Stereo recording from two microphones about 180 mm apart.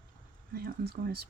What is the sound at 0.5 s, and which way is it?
Speech, 60° right (ahead or behind).